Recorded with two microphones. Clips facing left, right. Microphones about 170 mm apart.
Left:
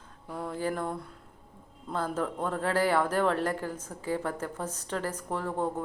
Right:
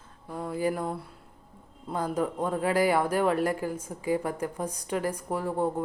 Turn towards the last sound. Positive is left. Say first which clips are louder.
# right 3 dB
turn(degrees=-10)  # may be behind; listen again after turning